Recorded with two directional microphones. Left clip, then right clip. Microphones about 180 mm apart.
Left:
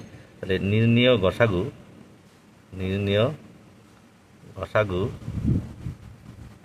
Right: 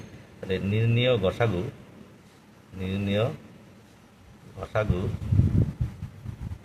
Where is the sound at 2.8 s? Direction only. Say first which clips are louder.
Left 5 dB; 50° left (ahead or behind).